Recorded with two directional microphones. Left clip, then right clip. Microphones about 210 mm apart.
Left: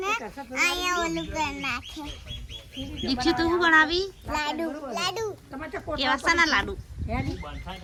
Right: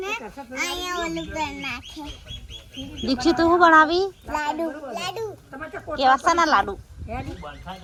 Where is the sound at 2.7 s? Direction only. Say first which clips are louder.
Right 1 dB; 40° left (ahead or behind).